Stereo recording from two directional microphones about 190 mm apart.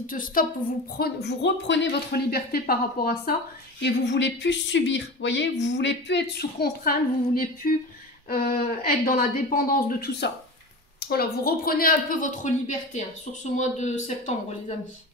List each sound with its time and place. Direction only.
0.0 s a woman's voice: 45° left (ahead or behind)
0.9 s speech: 60° left (ahead or behind)
3.8 s a woman's voice: 70° left (ahead or behind); by 14.3 s 40° left (ahead or behind)